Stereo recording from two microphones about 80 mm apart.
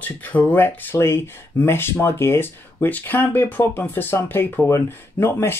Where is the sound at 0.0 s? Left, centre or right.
Left.